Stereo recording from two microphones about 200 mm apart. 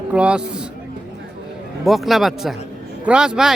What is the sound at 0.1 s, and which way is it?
Speech, 5° right (ahead or behind).